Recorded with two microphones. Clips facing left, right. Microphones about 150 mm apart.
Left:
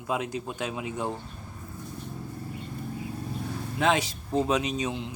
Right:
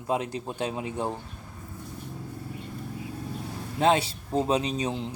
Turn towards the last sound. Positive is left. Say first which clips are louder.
# right 1 dB
turn(degrees=-35)  # may be behind; listen again after turning